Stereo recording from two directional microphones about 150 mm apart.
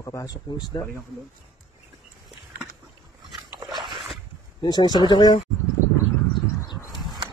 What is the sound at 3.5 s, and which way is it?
Dog, 30° right (ahead or behind).